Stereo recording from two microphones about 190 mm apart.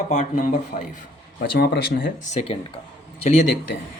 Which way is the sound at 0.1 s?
40° left (ahead or behind).